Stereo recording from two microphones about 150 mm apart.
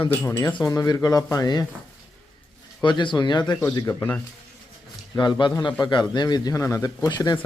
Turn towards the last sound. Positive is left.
turn(degrees=25)  # may be behind; listen again after turning